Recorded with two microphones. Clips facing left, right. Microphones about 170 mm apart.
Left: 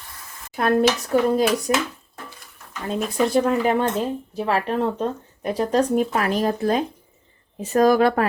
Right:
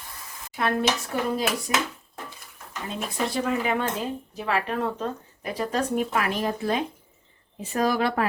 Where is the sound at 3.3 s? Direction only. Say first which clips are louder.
Left 6 dB; 45° left (ahead or behind).